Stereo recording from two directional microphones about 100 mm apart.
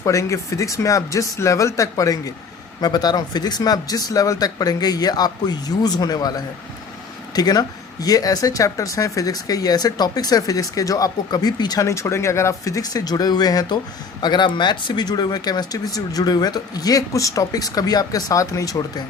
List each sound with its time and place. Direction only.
0.0 s speech: 30° left (ahead or behind)